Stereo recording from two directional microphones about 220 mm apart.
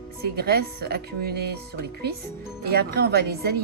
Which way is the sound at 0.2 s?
45° right (ahead or behind).